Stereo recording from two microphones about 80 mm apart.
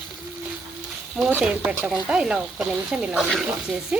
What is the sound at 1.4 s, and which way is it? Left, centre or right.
Speech, centre.